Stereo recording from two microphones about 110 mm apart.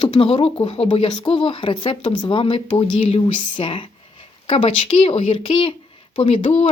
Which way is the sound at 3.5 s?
55° left (ahead or behind).